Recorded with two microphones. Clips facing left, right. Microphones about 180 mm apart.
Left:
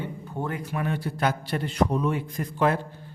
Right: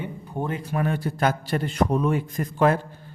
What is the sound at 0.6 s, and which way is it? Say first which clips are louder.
A man's voice: right 3 dB; 45° right (ahead or behind).